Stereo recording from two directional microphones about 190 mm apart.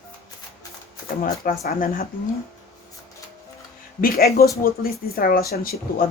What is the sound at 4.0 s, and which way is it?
Speech, 50° left (ahead or behind).